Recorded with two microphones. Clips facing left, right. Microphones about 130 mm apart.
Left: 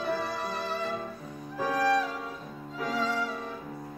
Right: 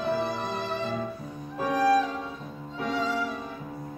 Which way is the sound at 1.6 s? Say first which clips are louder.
Right 3 dB; 5° right (ahead or behind).